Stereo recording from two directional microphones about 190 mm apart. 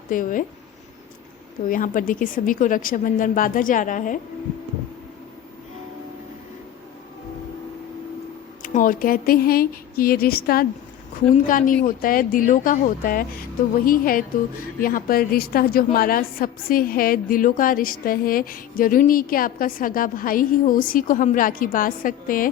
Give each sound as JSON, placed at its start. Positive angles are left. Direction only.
{"t": 0.1, "sound": "a woman's voice", "side_deg": 45}
{"t": 1.7, "sound": "a woman's voice", "side_deg": 45}
{"t": 8.6, "sound": "a woman's voice", "side_deg": 45}